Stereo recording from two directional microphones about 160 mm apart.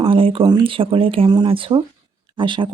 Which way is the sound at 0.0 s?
35° right (ahead or behind).